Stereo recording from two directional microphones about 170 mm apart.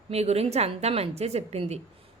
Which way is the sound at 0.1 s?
40° right (ahead or behind).